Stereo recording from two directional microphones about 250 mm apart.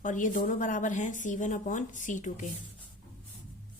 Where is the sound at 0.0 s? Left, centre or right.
Left.